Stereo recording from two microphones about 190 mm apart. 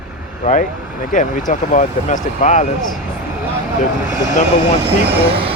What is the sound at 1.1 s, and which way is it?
Speech, 40° left (ahead or behind).